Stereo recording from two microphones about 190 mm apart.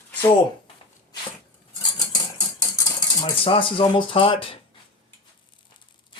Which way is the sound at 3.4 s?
25° left (ahead or behind).